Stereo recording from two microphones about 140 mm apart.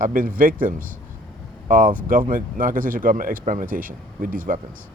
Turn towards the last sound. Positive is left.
turn(degrees=-70)  # may be behind; listen again after turning